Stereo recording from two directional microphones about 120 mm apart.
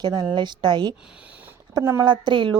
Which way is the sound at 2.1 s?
40° right (ahead or behind).